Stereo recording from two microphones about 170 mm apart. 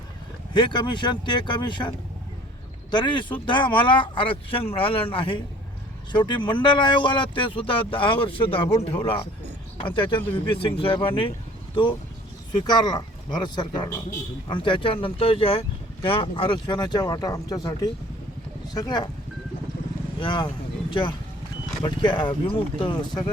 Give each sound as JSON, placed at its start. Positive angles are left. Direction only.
{"t": 0.5, "sound": "speech", "side_deg": 25}
{"t": 2.9, "sound": "speech", "side_deg": 25}
{"t": 20.1, "sound": "speech", "side_deg": 30}